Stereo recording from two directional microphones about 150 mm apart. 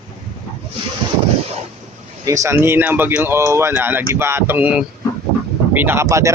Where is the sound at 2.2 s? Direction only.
20° right (ahead or behind).